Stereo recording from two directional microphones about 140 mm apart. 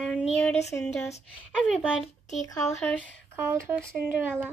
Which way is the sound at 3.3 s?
15° right (ahead or behind).